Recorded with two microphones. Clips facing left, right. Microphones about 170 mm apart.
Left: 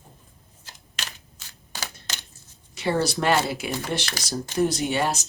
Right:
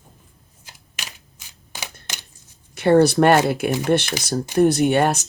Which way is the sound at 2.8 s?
60° right (ahead or behind).